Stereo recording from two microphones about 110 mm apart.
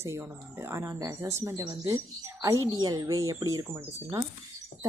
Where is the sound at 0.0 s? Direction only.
25° right (ahead or behind).